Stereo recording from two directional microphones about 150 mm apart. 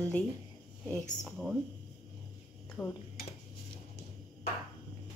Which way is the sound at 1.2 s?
5° right (ahead or behind).